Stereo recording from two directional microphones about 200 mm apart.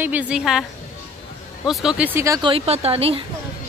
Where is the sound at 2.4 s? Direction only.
30° right (ahead or behind).